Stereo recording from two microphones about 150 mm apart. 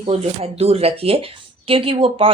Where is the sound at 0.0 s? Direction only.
45° right (ahead or behind).